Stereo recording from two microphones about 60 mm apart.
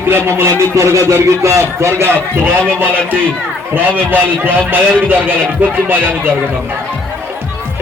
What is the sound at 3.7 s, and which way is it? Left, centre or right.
A man's voice, right.